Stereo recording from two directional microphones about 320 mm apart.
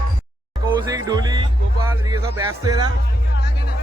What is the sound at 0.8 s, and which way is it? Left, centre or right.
Music, centre.